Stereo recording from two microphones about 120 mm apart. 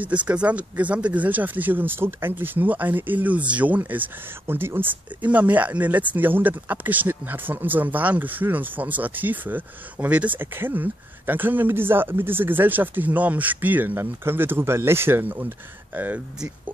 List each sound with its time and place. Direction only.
0.0 s speech: 10° right (ahead or behind)